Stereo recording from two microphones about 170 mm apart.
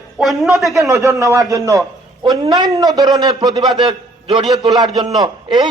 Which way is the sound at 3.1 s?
25° right (ahead or behind).